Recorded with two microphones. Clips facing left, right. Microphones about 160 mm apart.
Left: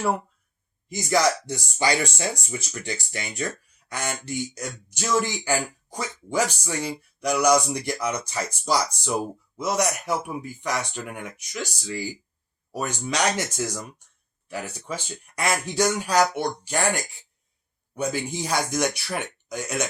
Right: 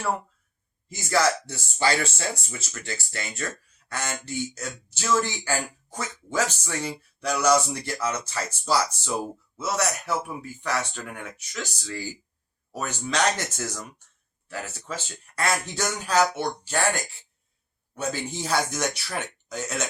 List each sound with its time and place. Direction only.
0.9 s speech: 15° left (ahead or behind)
17.9 s speech: 15° left (ahead or behind)